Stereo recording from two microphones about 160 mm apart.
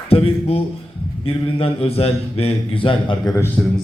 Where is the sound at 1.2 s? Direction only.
35° left (ahead or behind).